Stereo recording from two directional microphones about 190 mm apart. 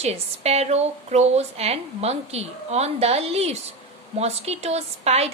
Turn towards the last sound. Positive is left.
turn(degrees=-35)  # may be behind; listen again after turning